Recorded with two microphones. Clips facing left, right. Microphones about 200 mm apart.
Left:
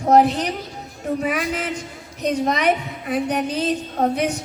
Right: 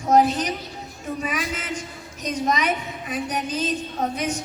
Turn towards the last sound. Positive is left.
turn(degrees=65)  # may be behind; listen again after turning